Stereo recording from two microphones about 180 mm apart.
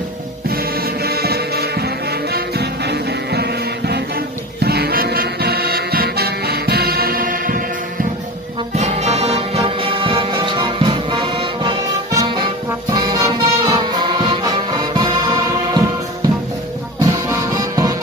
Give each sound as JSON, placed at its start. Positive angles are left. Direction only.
{"t": 1.0, "sound": "music", "side_deg": -60}
{"t": 8.7, "sound": "music", "side_deg": -35}
{"t": 17.0, "sound": "music", "side_deg": -20}